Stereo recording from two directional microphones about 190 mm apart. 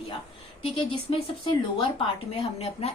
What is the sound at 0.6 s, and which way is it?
Speech, 30° left (ahead or behind).